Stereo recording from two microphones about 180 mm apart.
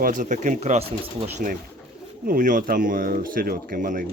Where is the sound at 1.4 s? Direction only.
50° right (ahead or behind).